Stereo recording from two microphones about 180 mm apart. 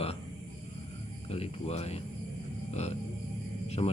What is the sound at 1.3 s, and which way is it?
Speech, 35° left (ahead or behind).